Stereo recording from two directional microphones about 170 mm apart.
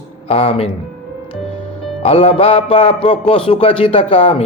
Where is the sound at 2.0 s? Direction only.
40° left (ahead or behind).